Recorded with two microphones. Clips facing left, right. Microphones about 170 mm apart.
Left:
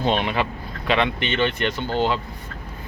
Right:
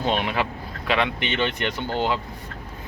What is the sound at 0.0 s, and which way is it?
Speech, 5° right (ahead or behind).